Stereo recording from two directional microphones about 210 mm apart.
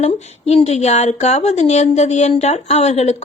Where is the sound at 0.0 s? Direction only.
30° left (ahead or behind).